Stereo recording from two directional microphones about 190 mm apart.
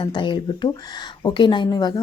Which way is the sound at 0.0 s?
25° left (ahead or behind).